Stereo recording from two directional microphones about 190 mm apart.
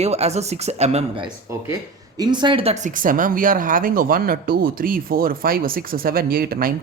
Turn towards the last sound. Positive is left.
turn(degrees=-50)  # may be behind; listen again after turning